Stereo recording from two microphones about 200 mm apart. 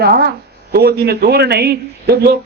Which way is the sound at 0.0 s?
50° right (ahead or behind).